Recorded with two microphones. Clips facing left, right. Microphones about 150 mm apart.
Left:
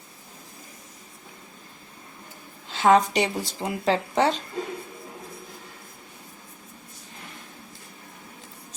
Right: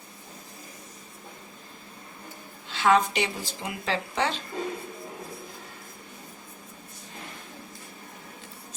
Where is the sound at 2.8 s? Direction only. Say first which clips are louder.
Left 3 dB; 35° left (ahead or behind).